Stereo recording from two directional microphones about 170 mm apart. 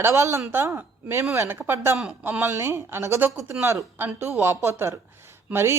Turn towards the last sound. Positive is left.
turn(degrees=-15)  # may be behind; listen again after turning